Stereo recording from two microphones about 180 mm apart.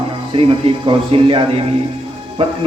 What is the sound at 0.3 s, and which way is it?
A man's voice, 30° right (ahead or behind).